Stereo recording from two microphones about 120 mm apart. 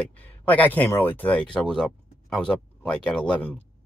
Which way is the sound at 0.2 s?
15° left (ahead or behind).